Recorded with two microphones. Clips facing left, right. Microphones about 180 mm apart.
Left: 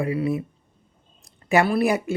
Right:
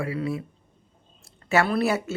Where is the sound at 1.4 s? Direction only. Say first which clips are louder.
Left 3 dB; 10° left (ahead or behind).